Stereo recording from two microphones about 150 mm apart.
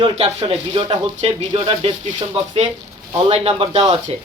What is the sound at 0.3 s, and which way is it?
Speech, 35° right (ahead or behind).